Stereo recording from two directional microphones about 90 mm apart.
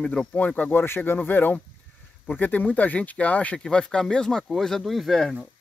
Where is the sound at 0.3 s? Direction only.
20° left (ahead or behind).